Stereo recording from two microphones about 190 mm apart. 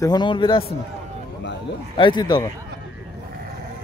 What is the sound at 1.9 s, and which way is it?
Speech, 25° left (ahead or behind).